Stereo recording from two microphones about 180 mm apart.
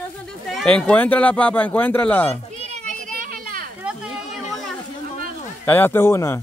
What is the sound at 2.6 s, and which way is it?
Children playing, 40° right (ahead or behind).